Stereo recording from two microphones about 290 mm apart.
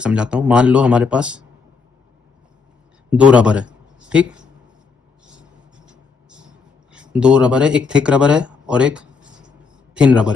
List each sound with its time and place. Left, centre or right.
0.0 s speech: centre
3.1 s a man's voice: centre
5.4 s filing: centre
6.9 s a man's voice: centre